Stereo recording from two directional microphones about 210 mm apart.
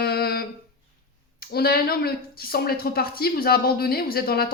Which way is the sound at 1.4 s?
50° left (ahead or behind).